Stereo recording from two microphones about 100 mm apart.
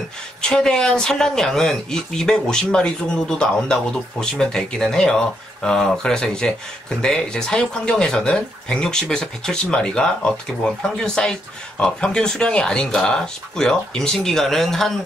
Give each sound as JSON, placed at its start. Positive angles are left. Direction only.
{"t": 0.4, "sound": "speech", "side_deg": 5}